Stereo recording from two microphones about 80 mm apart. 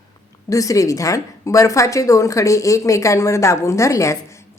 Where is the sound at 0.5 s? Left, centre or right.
Left.